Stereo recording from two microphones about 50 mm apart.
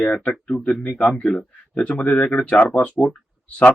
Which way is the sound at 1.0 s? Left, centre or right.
Left.